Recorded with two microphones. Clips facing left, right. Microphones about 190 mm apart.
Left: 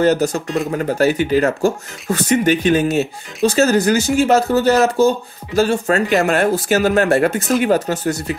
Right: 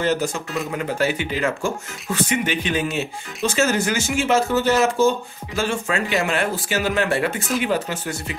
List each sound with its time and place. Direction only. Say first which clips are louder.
0.0 s speech: left 7 dB; 40° left (ahead or behind)